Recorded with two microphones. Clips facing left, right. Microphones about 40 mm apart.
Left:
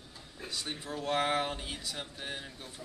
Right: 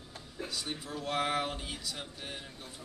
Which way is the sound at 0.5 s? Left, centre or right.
Centre.